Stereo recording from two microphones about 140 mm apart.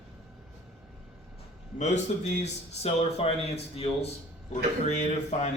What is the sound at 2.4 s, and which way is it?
A man's voice, 45° left (ahead or behind).